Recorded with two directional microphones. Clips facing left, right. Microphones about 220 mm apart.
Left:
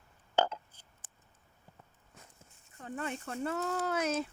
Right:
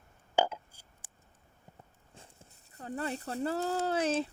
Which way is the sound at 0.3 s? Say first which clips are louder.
Right 1 dB; 10° right (ahead or behind).